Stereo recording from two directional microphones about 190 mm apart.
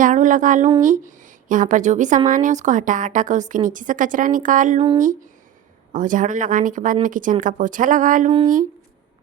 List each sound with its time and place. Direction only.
0.0 s a woman's voice: 40° right (ahead or behind)